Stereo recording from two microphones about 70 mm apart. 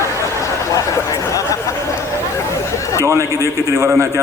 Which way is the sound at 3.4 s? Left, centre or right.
Right.